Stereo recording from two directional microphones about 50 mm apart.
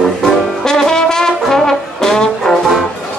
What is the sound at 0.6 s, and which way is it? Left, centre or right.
Brass instrument, centre.